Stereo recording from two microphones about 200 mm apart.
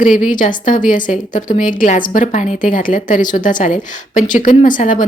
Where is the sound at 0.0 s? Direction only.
40° left (ahead or behind).